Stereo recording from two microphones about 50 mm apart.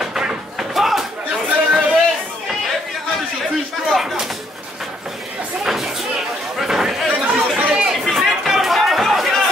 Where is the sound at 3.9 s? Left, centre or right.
Centre.